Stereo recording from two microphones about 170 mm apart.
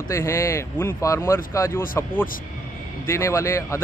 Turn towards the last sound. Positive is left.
turn(degrees=15)  # may be behind; listen again after turning